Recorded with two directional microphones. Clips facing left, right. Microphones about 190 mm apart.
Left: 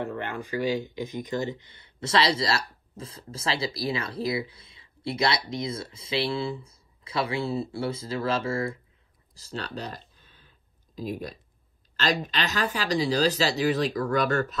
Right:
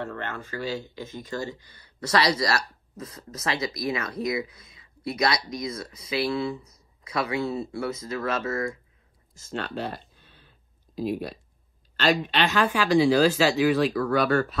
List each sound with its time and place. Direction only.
0.0 s speech: 15° left (ahead or behind)
9.3 s a sound: 35° left (ahead or behind)
11.0 s speech: 45° left (ahead or behind)